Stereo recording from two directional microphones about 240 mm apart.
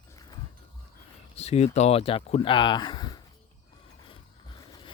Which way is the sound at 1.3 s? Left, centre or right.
Left.